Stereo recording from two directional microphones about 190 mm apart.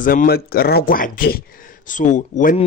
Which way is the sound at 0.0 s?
45° left (ahead or behind).